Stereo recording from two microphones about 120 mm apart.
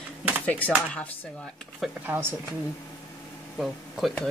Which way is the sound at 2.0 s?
15° right (ahead or behind).